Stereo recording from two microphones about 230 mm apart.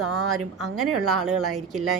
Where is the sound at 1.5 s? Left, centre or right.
Centre.